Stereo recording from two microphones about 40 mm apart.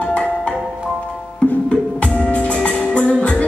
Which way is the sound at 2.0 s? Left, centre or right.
Left.